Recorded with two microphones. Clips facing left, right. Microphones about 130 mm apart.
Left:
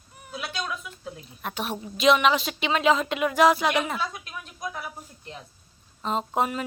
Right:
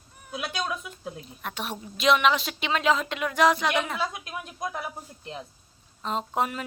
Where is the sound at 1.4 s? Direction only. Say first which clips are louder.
Left 5 dB; centre (ahead or behind).